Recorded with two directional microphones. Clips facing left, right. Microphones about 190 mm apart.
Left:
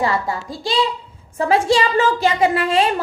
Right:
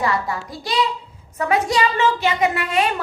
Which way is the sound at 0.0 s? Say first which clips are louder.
Left 2 dB; 25° left (ahead or behind).